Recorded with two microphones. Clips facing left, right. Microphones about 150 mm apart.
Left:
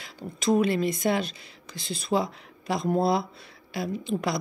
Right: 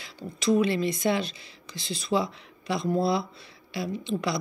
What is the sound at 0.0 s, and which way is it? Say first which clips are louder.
Speech: even; 50° left (ahead or behind).